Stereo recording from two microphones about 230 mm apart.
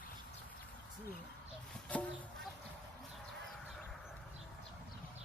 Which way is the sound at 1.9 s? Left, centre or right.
Centre.